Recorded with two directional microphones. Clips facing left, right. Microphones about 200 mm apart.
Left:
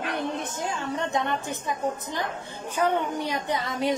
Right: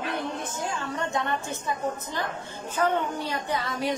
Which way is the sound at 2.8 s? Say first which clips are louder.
Left 1 dB; 15° left (ahead or behind).